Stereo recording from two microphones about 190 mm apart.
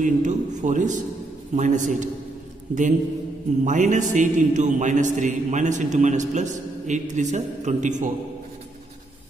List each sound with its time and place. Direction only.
0.0 s a man's voice: 40° right (ahead or behind)